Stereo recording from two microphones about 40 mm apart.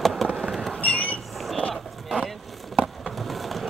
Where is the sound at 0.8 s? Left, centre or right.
Left.